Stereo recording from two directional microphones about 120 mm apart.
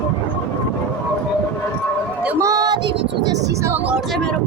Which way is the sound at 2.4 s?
30° right (ahead or behind).